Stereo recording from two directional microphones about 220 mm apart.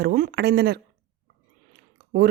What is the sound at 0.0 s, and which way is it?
Speech, 45° right (ahead or behind).